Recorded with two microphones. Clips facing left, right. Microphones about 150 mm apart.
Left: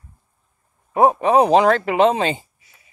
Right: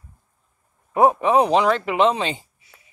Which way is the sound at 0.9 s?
35° left (ahead or behind).